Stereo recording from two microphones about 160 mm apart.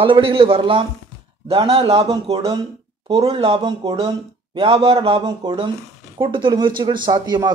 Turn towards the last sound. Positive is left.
turn(degrees=-25)  # may be behind; listen again after turning